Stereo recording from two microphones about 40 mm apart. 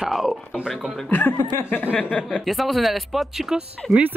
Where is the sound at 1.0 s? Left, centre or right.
Left.